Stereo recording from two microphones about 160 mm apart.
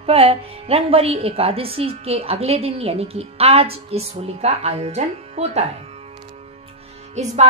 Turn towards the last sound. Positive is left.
turn(degrees=-45)  # may be behind; listen again after turning